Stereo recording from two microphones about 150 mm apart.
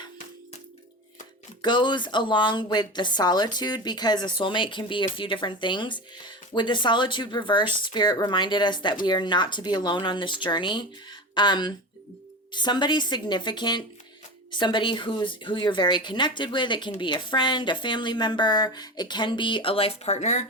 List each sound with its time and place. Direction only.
1.6 s a woman's voice: 30° left (ahead or behind); by 20.4 s 50° left (ahead or behind)